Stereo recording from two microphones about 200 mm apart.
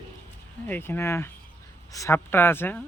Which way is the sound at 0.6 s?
10° left (ahead or behind).